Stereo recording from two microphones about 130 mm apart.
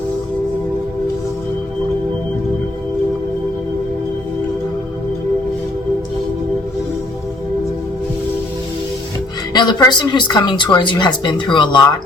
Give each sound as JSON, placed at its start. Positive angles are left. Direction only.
{"t": 9.5, "sound": "speech", "side_deg": 30}